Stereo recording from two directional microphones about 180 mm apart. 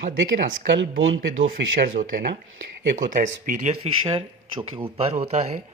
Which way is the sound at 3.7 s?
35° right (ahead or behind).